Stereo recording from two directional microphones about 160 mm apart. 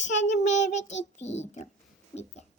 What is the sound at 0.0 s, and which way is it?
A child's voice, 50° left (ahead or behind).